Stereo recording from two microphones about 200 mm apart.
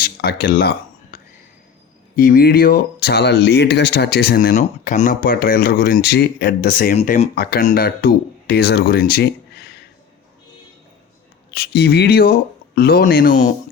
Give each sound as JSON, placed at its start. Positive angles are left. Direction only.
{"t": 0.0, "sound": "speech", "side_deg": 50}
{"t": 1.1, "sound": "a sound", "side_deg": 40}
{"t": 2.1, "sound": "speech", "side_deg": 45}
{"t": 11.5, "sound": "speech", "side_deg": 55}